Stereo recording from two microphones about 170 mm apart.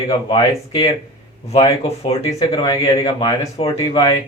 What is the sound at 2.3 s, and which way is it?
Speech, 20° left (ahead or behind).